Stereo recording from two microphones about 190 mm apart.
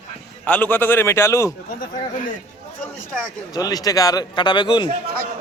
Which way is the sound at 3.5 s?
20° left (ahead or behind).